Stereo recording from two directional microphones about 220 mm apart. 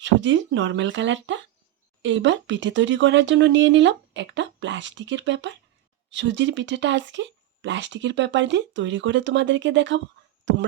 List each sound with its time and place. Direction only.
0.0 s speech: 55° right (ahead or behind)